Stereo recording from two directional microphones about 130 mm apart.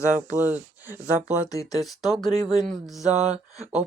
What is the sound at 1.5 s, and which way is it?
Speech, 25° left (ahead or behind).